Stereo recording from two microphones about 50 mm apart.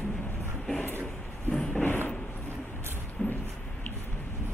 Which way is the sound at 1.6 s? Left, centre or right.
Centre.